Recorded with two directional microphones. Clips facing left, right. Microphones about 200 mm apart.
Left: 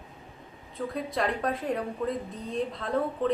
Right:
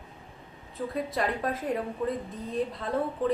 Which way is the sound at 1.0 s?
Centre (ahead or behind).